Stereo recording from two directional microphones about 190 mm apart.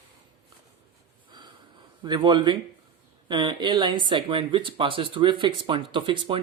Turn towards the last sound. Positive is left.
turn(degrees=-25)  # may be behind; listen again after turning